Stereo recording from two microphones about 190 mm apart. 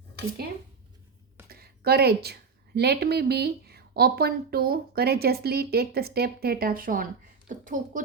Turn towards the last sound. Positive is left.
turn(degrees=-45)  # may be behind; listen again after turning